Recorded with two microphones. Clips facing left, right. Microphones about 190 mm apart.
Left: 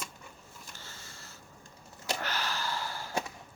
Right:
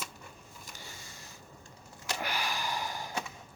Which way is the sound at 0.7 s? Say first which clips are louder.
Right 3 dB; 15° right (ahead or behind).